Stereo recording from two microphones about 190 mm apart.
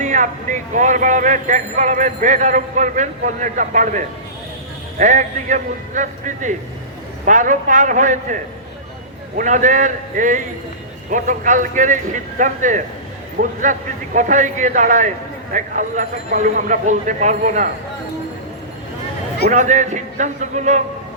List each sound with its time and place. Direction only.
0.0 s speech: 40° right (ahead or behind)
9.4 s speech: 40° right (ahead or behind)
19.5 s speech: 40° right (ahead or behind)